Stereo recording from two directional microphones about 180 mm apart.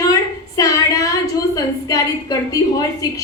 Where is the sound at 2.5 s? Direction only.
20° left (ahead or behind).